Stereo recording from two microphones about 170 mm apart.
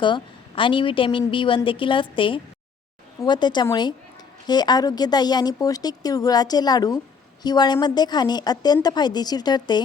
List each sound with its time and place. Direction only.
0.0 s a woman's voice: 30° left (ahead or behind)